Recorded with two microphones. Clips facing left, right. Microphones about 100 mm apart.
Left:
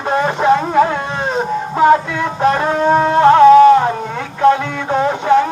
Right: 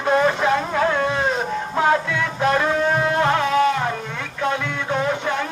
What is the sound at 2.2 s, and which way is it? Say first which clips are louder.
Music: left 5 dB; 30° left (ahead or behind).